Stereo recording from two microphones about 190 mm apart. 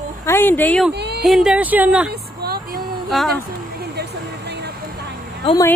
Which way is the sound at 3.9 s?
60° right (ahead or behind).